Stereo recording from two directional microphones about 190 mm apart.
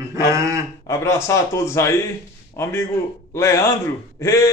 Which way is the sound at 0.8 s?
15° left (ahead or behind).